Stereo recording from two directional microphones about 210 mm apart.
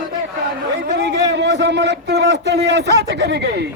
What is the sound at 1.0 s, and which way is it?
Speech, 55° right (ahead or behind).